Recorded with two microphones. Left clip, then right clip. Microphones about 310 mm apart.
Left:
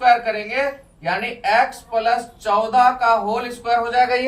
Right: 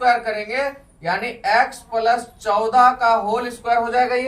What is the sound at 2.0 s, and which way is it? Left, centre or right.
Speech, centre.